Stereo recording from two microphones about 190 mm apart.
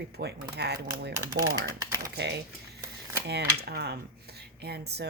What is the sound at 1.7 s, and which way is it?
Speech, 20° right (ahead or behind).